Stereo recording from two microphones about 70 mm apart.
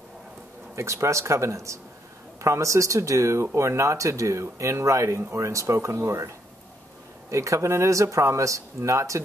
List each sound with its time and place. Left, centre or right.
0.7 s speech: right